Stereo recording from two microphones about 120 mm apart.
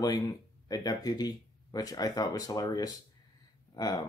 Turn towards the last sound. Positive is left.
turn(degrees=30)  # may be behind; listen again after turning